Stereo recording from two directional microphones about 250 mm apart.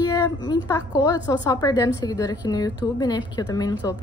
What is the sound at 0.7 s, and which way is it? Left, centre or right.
A woman's voice, centre.